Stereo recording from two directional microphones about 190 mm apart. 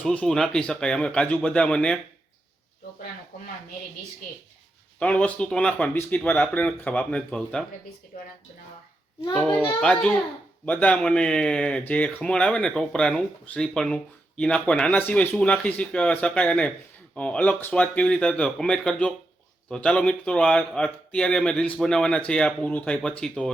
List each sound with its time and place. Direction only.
0.0 s speech: 5° left (ahead or behind)
4.9 s speech: 5° left (ahead or behind)
9.3 s speech: 5° left (ahead or behind)